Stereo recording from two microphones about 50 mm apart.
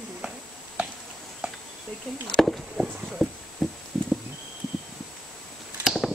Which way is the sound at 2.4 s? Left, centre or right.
Centre.